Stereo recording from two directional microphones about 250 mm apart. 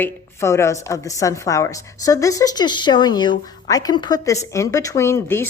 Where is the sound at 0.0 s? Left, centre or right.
Centre.